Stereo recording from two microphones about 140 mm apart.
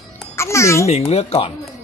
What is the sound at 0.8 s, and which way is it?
Speech, 50° left (ahead or behind).